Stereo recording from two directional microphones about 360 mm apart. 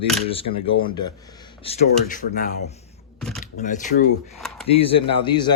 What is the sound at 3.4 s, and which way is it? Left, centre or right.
Speech, left.